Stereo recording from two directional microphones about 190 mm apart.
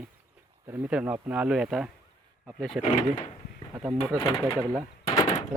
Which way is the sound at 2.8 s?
40° left (ahead or behind).